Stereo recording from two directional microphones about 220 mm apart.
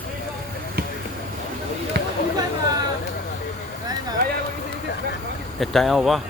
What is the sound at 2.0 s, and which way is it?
Chatter, 45° right (ahead or behind).